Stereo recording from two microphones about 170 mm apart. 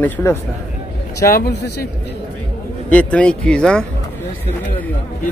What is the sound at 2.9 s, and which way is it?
Speech, 5° left (ahead or behind).